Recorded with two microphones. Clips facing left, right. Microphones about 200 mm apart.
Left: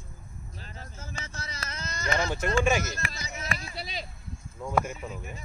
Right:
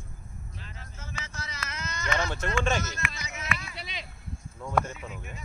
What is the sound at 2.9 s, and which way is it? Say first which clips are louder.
Speech: even; 35° left (ahead or behind).